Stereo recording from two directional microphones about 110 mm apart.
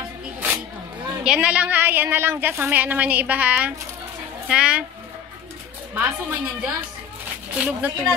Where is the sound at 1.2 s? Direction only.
10° right (ahead or behind).